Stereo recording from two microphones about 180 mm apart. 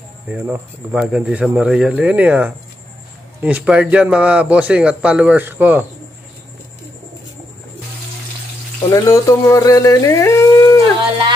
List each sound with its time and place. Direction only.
0.3 s a man's voice: 5° right (ahead or behind)
8.9 s speech: 15° left (ahead or behind)